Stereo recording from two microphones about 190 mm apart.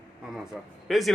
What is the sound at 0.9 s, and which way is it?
Speech, centre (ahead or behind).